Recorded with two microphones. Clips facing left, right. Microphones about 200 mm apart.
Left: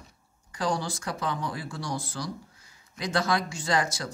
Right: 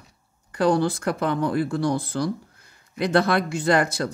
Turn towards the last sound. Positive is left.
turn(degrees=-60)  # may be behind; listen again after turning